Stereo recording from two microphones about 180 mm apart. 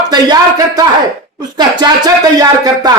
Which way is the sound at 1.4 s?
25° right (ahead or behind).